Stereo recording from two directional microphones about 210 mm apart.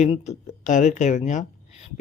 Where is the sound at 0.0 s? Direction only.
30° left (ahead or behind).